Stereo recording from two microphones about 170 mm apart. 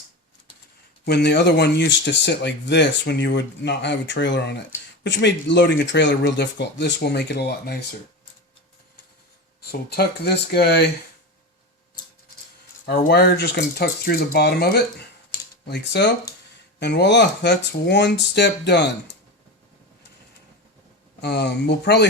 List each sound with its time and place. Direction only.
1.0 s speech: 75° left (ahead or behind)
9.6 s speech: 70° left (ahead or behind)
13.1 s speech: 85° left
13.6 s speech: 65° left (ahead or behind)
15.6 s speech: 90° left
21.2 s speech: 80° left